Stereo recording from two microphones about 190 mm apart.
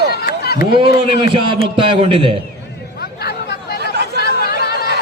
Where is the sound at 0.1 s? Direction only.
55° left (ahead or behind).